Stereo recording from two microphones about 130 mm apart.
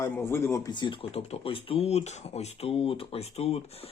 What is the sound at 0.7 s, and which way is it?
Speech, 35° left (ahead or behind).